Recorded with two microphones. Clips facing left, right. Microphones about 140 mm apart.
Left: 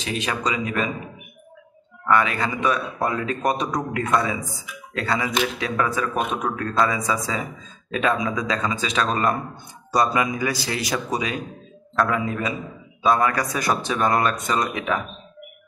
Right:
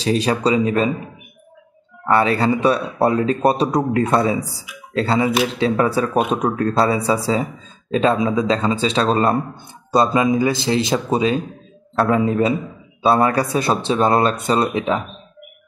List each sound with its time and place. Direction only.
0.0 s speech: 35° right (ahead or behind)
2.0 s speech: 35° right (ahead or behind)